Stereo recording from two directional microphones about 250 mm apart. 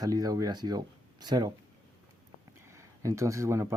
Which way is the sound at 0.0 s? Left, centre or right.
Centre.